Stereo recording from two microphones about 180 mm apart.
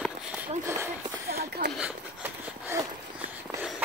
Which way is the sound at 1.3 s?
60° right (ahead or behind).